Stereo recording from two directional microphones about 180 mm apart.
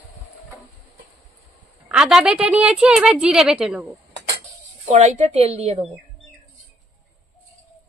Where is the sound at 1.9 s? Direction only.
5° right (ahead or behind).